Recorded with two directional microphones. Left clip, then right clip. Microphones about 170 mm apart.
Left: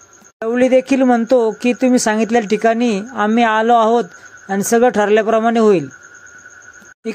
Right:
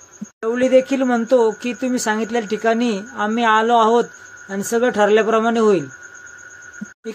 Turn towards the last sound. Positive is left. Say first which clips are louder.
# left 3 dB
turn(degrees=40)  # may be behind; listen again after turning